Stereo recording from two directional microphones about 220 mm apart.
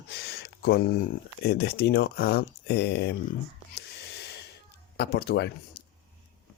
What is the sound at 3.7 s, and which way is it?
Snort, 50° left (ahead or behind).